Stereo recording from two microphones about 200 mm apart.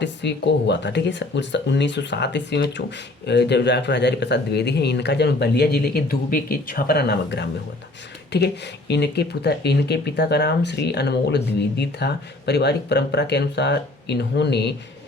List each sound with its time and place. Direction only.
0.0 s speech: 60° left (ahead or behind)